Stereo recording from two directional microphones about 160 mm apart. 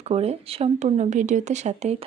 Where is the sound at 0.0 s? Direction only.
40° right (ahead or behind).